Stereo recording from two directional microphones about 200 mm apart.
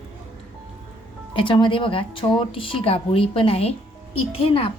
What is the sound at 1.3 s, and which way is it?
A woman's voice, 25° left (ahead or behind).